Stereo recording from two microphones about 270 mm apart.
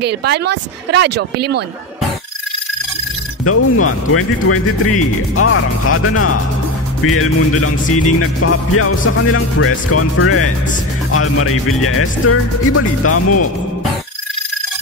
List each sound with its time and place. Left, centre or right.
0.0 s speech: right
3.4 s speech: left